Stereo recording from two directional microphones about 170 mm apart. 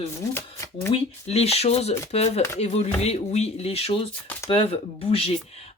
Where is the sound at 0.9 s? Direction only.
40° left (ahead or behind).